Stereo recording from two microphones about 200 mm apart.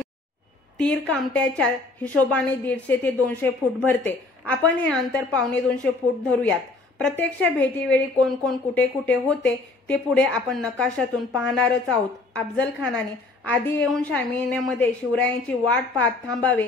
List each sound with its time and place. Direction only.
0.7 s a woman's voice: 5° left (ahead or behind)